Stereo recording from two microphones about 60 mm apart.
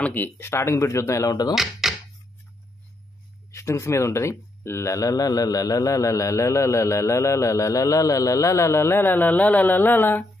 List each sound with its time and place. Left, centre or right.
0.1 s speech: left
1.5 s speech: centre
3.5 s speech: left
9.2 s speech: left